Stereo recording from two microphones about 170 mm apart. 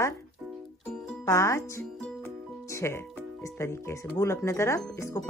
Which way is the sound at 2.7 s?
15° left (ahead or behind).